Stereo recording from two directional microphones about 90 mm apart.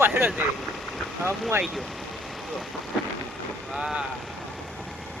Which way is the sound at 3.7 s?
5° right (ahead or behind).